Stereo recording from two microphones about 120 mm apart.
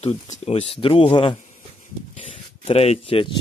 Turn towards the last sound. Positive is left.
turn(degrees=50)  # may be behind; listen again after turning